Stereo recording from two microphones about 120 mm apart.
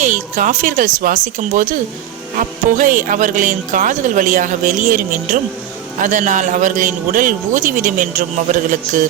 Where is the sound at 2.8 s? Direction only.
90° right.